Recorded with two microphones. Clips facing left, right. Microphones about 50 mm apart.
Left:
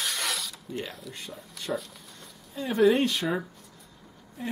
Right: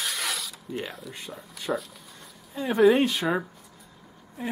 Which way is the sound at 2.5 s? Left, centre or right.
Centre.